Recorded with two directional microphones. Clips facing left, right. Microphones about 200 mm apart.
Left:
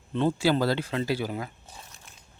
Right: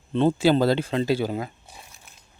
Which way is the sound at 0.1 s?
25° right (ahead or behind).